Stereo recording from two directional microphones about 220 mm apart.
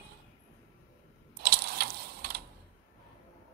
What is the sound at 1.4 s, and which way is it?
Mechanisms, 45° right (ahead or behind).